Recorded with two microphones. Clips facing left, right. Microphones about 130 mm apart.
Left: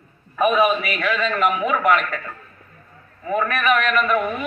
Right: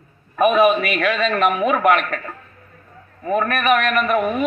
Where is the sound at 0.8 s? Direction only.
65° right (ahead or behind).